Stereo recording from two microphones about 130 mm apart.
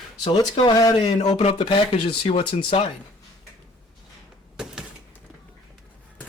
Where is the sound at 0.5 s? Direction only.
40° left (ahead or behind).